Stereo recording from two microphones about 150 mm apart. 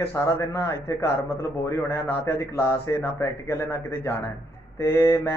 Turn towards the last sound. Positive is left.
turn(degrees=20)  # may be behind; listen again after turning